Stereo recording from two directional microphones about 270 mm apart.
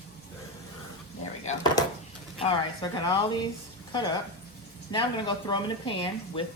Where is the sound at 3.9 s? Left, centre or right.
Centre.